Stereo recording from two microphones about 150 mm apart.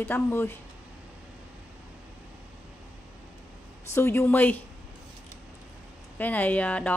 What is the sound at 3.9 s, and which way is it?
Speech, 15° left (ahead or behind).